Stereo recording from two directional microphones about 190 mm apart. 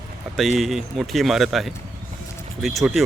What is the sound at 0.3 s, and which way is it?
Speech, centre (ahead or behind).